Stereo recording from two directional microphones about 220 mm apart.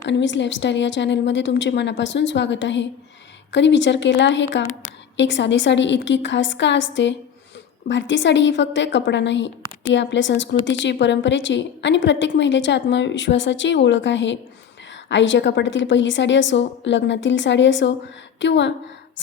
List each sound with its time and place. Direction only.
0.0 s a woman's voice: 55° left (ahead or behind)